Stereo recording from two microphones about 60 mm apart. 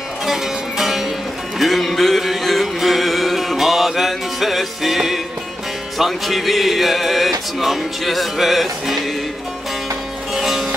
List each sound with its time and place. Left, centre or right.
0.2 s music: centre
10.3 s music: centre